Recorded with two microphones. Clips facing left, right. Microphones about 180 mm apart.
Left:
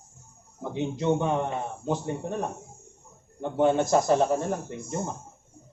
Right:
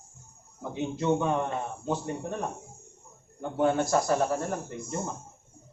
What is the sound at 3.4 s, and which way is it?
Speech, 25° left (ahead or behind).